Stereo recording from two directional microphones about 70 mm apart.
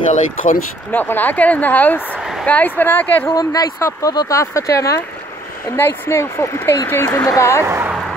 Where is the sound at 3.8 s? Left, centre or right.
Left.